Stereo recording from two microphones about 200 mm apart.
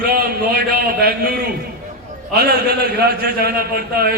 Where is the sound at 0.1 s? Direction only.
50° right (ahead or behind).